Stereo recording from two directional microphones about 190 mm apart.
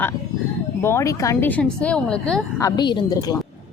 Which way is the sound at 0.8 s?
15° left (ahead or behind).